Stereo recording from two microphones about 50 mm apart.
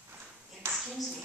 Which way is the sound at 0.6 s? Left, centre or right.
Right.